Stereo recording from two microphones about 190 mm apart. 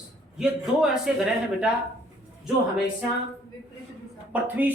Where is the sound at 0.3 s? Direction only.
5° right (ahead or behind).